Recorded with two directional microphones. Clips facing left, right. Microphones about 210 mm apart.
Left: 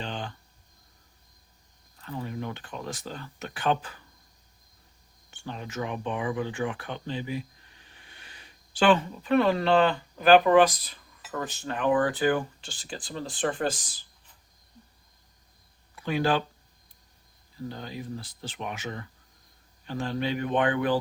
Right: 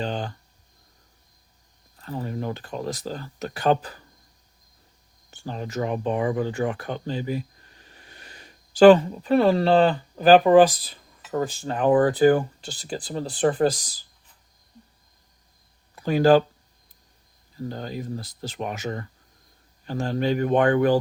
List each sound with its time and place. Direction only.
0.0 s speech: 40° right (ahead or behind)
2.0 s speech: 35° right (ahead or behind)
5.3 s speech: 40° right (ahead or behind)
16.0 s speech: 40° right (ahead or behind)
17.7 s speech: 45° right (ahead or behind)